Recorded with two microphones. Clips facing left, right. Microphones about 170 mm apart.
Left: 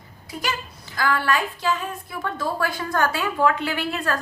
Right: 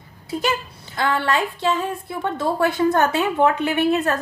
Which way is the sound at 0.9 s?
25° right (ahead or behind).